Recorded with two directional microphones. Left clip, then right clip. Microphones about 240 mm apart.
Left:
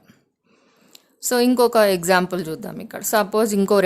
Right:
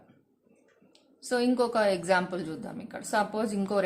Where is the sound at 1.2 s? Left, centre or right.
Left.